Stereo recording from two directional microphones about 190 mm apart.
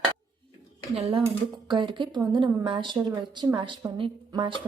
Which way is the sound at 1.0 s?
30° right (ahead or behind).